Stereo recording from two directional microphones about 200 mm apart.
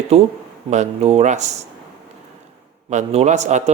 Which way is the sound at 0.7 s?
35° right (ahead or behind).